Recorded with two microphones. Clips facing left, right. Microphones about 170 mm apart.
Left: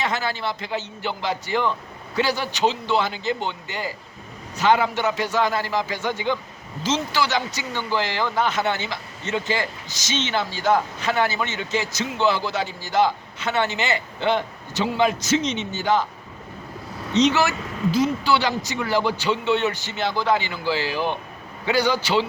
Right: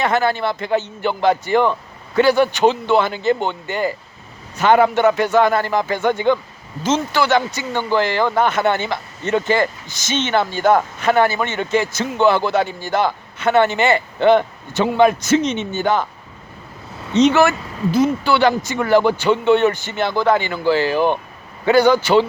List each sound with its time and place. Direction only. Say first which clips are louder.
0.0 s speech: right 8 dB; 55° right (ahead or behind)
17.1 s speech: right 6 dB; 55° right (ahead or behind)